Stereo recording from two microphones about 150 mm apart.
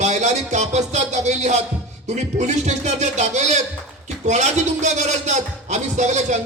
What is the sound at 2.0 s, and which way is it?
A man's voice, 50° right (ahead or behind).